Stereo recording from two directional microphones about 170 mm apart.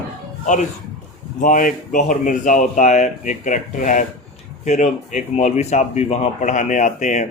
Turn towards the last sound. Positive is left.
turn(degrees=45)  # may be behind; listen again after turning